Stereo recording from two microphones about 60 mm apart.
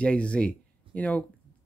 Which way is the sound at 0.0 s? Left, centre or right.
Centre.